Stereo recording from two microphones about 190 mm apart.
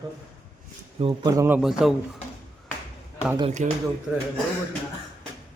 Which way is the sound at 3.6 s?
40° right (ahead or behind).